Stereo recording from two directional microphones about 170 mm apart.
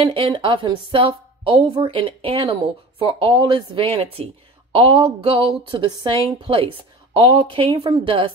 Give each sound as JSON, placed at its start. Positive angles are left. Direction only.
{"t": 0.0, "sound": "a woman's voice", "side_deg": -30}